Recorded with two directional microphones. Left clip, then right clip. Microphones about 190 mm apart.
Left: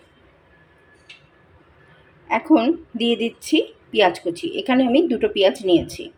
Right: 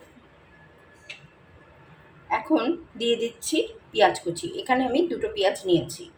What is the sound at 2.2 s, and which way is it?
A woman's voice, 45° left (ahead or behind).